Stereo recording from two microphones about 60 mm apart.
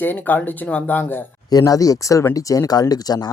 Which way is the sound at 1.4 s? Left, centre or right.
Left.